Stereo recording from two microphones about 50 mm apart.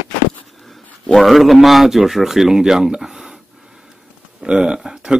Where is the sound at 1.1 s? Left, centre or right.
Centre.